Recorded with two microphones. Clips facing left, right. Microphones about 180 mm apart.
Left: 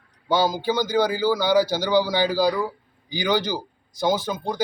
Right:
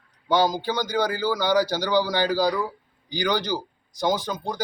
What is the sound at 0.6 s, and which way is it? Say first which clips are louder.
A man's voice: left 3 dB; 10° left (ahead or behind).